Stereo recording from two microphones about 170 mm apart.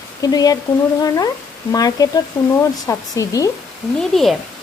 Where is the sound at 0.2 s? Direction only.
20° left (ahead or behind).